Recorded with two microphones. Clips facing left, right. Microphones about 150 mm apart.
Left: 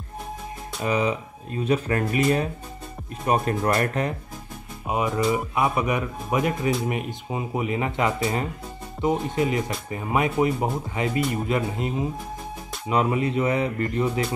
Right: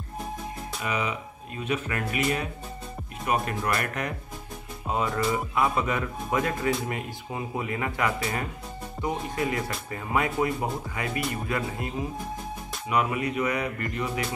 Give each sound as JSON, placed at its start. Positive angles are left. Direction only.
{"t": 0.8, "sound": "speech", "side_deg": 35}
{"t": 4.8, "sound": "speech", "side_deg": 15}